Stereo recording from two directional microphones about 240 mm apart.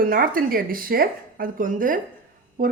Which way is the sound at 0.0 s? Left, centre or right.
Right.